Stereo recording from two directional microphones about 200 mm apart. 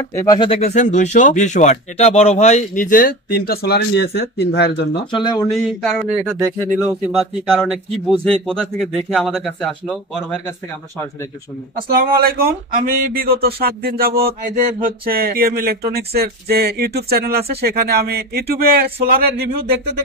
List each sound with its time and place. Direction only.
0.0 s speech: 15° left (ahead or behind); by 4.8 s 55° left (ahead or behind)
5.2 s speech: 20° left (ahead or behind)
5.6 s speech: centre (ahead or behind)
11.9 s speech: 50° right (ahead or behind)